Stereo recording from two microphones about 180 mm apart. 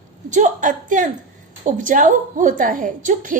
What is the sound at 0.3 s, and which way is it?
A woman's voice, 45° right (ahead or behind).